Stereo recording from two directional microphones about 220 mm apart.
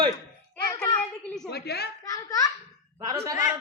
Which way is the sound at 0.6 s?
15° left (ahead or behind).